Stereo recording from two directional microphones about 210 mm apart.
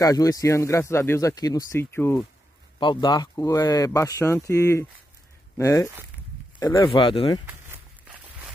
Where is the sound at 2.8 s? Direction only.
20° left (ahead or behind).